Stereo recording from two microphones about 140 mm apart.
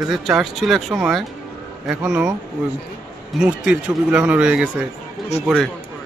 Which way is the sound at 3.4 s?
5° right (ahead or behind).